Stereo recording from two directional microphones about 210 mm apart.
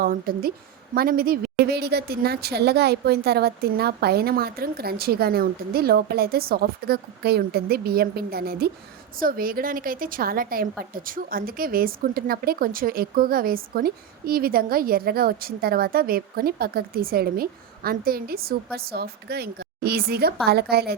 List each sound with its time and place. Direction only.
0.0 s a woman's voice: 45° right (ahead or behind)